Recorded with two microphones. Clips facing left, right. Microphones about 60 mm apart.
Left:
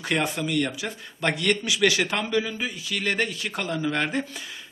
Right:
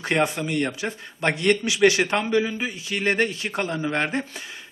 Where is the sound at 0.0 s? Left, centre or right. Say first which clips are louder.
Right 3 dB; right.